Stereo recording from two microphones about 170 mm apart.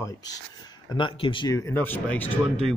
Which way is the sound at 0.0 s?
20° left (ahead or behind).